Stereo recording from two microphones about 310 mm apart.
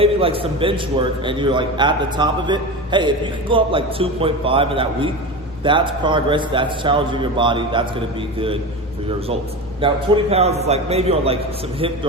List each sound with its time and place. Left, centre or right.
0.0 s a man's voice: centre
9.0 s a man's voice: centre